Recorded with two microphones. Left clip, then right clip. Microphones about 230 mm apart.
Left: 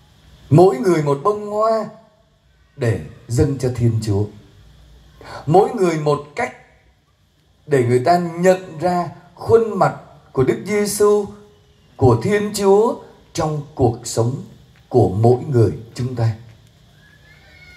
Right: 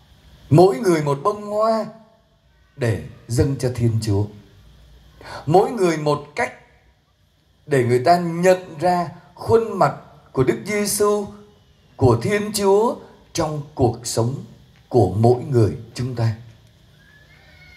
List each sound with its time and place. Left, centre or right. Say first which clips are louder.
0.5 s a man's voice: left 2 dB; right
7.6 s a man's voice: left 1 dB; right